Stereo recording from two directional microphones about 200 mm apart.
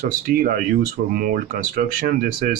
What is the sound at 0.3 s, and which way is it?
Speech, 45° right (ahead or behind).